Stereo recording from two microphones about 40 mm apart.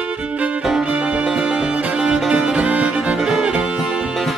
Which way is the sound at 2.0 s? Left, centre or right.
Right.